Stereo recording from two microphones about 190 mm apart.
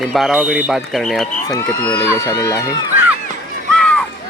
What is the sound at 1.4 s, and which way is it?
A man's voice, 20° left (ahead or behind).